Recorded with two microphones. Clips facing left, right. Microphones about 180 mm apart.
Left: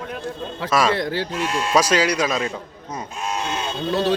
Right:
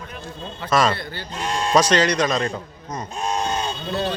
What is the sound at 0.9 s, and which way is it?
Speech, 90° left.